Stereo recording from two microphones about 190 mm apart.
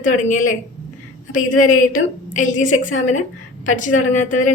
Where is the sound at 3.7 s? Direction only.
40° left (ahead or behind).